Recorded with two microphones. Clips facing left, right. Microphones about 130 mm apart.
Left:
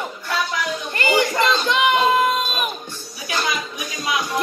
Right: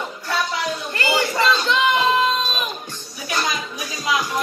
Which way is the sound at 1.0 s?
15° left (ahead or behind).